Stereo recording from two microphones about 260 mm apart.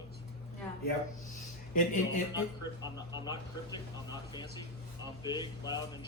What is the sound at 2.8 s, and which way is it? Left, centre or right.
Speech, centre.